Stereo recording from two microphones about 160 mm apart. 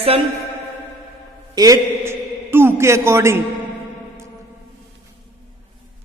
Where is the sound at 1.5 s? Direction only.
20° right (ahead or behind).